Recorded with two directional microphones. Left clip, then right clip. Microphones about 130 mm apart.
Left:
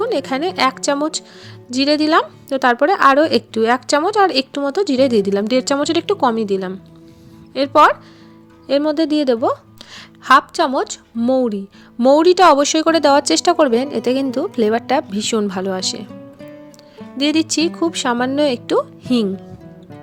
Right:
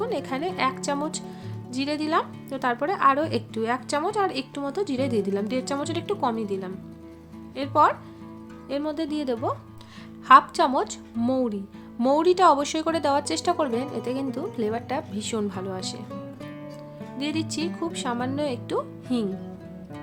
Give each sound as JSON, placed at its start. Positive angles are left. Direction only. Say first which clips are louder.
{"t": 0.0, "sound": "speech", "louder": "left 9 dB", "side_deg": 45}
{"t": 17.2, "sound": "speech", "louder": "left 12 dB", "side_deg": 55}